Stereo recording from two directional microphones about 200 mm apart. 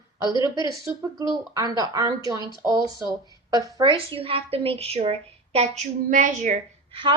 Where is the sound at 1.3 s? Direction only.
20° right (ahead or behind).